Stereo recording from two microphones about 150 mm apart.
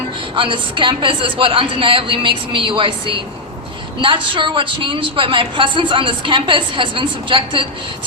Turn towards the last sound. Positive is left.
turn(degrees=-35)  # may be behind; listen again after turning